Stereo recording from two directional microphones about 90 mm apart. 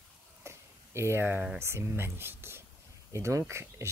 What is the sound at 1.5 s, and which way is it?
Speech, 25° right (ahead or behind).